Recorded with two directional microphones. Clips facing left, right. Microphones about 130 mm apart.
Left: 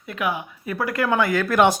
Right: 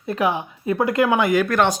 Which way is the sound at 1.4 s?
5° left (ahead or behind).